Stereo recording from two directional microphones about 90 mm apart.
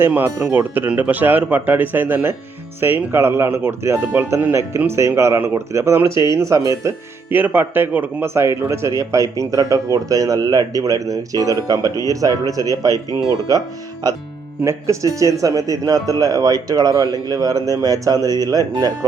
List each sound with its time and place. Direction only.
0.1 s speech: 20° right (ahead or behind)
7.3 s a man's voice: 20° right (ahead or behind); by 18.9 s 45° right (ahead or behind)